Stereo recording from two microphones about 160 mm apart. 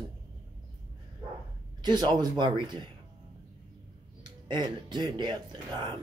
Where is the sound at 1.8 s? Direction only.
25° right (ahead or behind).